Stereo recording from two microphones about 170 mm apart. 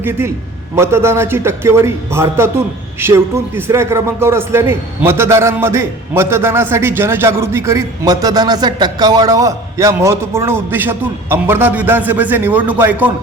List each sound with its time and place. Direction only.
0.0 s a man's voice: 15° right (ahead or behind)